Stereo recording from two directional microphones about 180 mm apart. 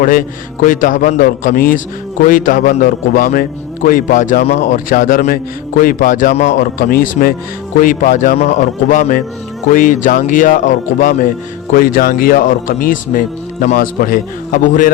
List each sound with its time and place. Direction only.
0.0 s a man's voice: 50° left (ahead or behind)